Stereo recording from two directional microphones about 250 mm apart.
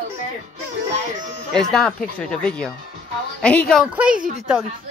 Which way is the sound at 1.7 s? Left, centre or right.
Centre.